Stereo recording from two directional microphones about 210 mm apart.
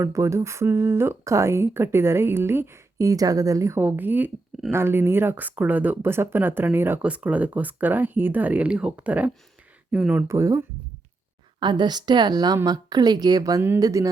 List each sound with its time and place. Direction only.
0.0 s speech: 15° right (ahead or behind)
11.6 s a woman's voice: 20° right (ahead or behind)